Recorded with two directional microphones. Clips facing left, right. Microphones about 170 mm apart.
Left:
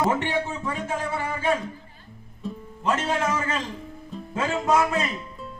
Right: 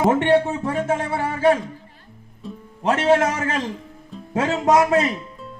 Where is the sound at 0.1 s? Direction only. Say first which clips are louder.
Right 8 dB; 65° right (ahead or behind).